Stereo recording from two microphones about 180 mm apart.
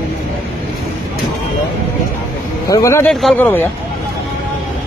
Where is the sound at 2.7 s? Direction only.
15° left (ahead or behind).